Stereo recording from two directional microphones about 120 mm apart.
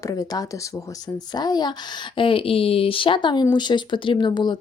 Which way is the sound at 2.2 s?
50° left (ahead or behind).